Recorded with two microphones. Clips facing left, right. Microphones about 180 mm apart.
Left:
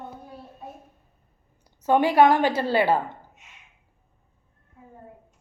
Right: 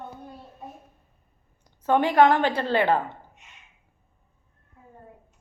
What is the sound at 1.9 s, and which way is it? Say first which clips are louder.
A woman's voice: left 1 dB; 10° left (ahead or behind).